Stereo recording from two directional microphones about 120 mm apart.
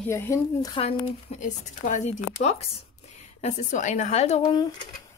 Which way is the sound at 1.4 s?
90° left.